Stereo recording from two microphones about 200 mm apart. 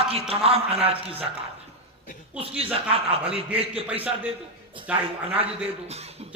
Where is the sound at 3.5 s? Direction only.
30° right (ahead or behind).